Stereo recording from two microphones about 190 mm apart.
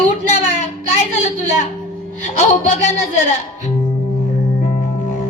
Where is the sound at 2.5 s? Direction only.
35° left (ahead or behind).